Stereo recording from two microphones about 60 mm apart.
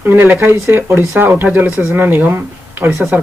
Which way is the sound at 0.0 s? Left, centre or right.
Right.